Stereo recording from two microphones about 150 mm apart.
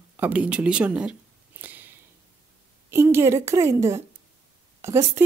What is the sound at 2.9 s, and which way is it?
A woman's voice, 15° right (ahead or behind).